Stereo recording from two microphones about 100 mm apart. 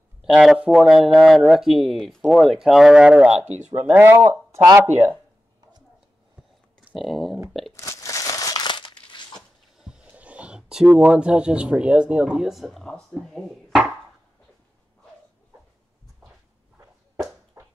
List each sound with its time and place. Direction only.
0.2 s speech: centre (ahead or behind); by 5.1 s 20° right (ahead or behind)
6.9 s speech: centre (ahead or behind)
7.7 s crumpling: 30° left (ahead or behind)
8.6 s crumpling: 50° left (ahead or behind)
9.8 s speech: 10° right (ahead or behind)
17.6 s a sound: 30° right (ahead or behind)